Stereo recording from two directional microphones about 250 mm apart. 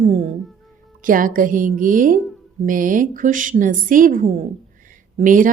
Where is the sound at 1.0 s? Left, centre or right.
Right.